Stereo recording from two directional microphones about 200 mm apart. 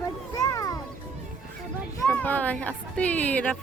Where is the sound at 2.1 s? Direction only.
10° left (ahead or behind).